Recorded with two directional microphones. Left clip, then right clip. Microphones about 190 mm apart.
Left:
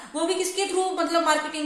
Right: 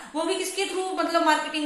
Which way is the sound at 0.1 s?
60° left (ahead or behind).